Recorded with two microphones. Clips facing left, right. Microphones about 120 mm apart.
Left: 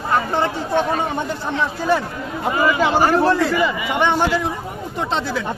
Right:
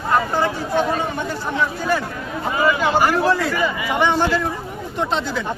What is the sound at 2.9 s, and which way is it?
Speech, 30° left (ahead or behind).